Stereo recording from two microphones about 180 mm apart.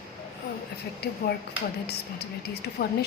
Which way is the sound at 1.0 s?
60° left (ahead or behind).